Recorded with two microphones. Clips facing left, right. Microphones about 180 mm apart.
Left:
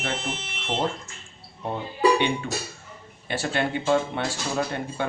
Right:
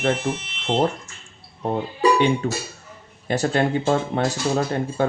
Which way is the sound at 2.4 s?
40° right (ahead or behind).